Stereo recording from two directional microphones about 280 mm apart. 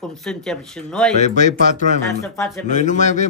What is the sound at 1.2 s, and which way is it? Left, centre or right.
A man's voice, left.